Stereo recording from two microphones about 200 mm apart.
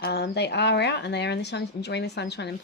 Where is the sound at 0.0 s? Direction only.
55° left (ahead or behind).